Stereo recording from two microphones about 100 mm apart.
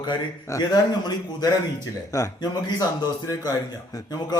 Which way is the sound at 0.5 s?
40° left (ahead or behind).